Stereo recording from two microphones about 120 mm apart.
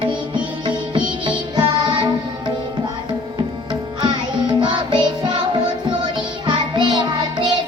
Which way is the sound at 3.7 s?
40° right (ahead or behind).